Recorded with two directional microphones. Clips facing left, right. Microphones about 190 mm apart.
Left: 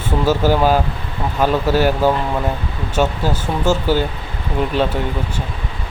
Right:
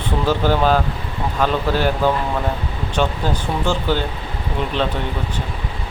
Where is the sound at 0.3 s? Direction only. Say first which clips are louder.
Left 2 dB; 10° left (ahead or behind).